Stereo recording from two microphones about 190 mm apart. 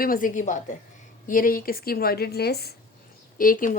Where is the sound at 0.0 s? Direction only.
45° left (ahead or behind).